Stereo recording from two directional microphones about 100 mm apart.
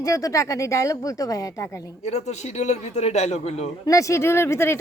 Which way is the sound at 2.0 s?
90° left.